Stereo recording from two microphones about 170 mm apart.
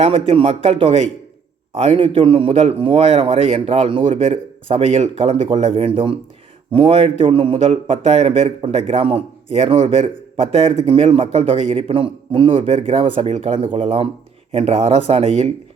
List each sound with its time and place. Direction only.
0.0 s a man's voice: 35° right (ahead or behind)